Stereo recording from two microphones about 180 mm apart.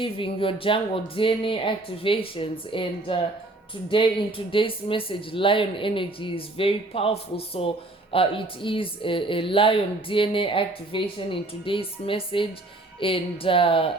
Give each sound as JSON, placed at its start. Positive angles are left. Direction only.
{"t": 0.0, "sound": "a woman's voice", "side_deg": 30}